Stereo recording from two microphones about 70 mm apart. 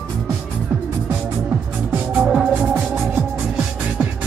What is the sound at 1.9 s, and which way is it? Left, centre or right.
Music, right.